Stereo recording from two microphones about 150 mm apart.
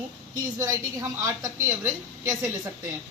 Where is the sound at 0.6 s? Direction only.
20° right (ahead or behind).